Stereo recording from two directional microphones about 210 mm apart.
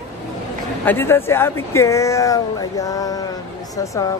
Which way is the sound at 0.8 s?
10° left (ahead or behind).